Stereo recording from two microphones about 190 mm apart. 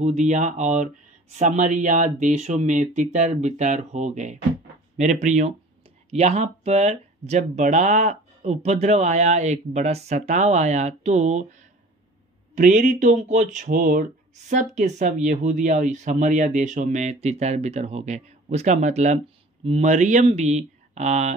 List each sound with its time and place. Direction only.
0.0 s speech: 40° right (ahead or behind)